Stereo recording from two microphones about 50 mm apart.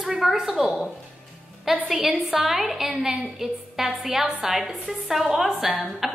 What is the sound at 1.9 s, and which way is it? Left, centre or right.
A woman's voice, centre.